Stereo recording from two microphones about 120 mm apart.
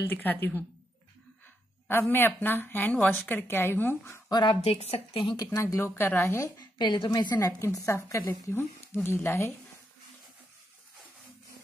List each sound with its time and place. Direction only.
0.1 s speech: 15° left (ahead or behind)
1.9 s speech: 20° left (ahead or behind)
4.3 s a woman's voice: 40° left (ahead or behind)
4.6 s a woman's voice: 55° left (ahead or behind)
5.3 s speech: 30° left (ahead or behind)
6.6 s a woman's voice: 40° left (ahead or behind)
7.3 s speech: 25° left (ahead or behind)